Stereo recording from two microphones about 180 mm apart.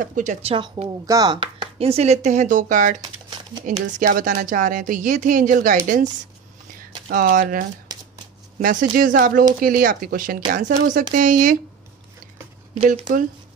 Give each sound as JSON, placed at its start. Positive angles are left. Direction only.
{"t": 0.0, "sound": "speech", "side_deg": -45}
{"t": 1.0, "sound": "speech", "side_deg": -20}
{"t": 4.0, "sound": "speech", "side_deg": -50}
{"t": 7.1, "sound": "speech", "side_deg": -55}
{"t": 12.7, "sound": "speech", "side_deg": -35}